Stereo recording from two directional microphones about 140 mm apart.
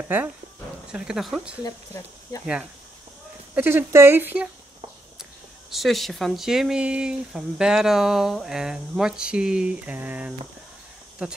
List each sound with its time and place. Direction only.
0.1 s speech: 15° right (ahead or behind)
0.9 s speech: 5° right (ahead or behind)
1.6 s speech: 25° left (ahead or behind)
3.5 s speech: 15° right (ahead or behind)
5.7 s speech: centre (ahead or behind)